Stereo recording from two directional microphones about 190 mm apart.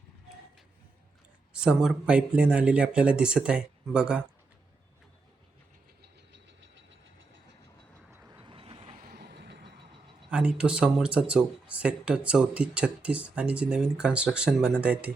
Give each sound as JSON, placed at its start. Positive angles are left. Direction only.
{"t": 1.5, "sound": "speech", "side_deg": -5}
{"t": 6.0, "sound": "vehicle", "side_deg": -65}
{"t": 8.1, "sound": "vehicle", "side_deg": -15}
{"t": 8.4, "sound": "vehicle", "side_deg": -30}
{"t": 9.0, "sound": "vehicle", "side_deg": -55}
{"t": 10.3, "sound": "speech", "side_deg": -5}